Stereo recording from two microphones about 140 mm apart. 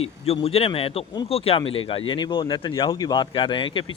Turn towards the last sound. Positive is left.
turn(degrees=35)  # may be behind; listen again after turning